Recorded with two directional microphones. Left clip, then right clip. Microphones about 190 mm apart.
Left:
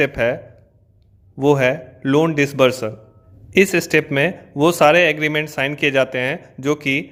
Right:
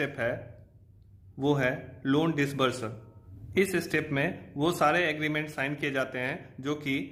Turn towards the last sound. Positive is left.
turn(degrees=35)  # may be behind; listen again after turning